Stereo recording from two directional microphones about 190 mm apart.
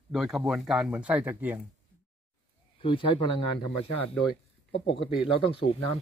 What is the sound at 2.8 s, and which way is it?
Speech, 30° left (ahead or behind).